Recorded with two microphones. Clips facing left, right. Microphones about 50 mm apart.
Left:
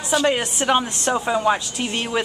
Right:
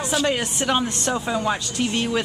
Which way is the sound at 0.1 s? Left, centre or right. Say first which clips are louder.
Left 4 dB; centre.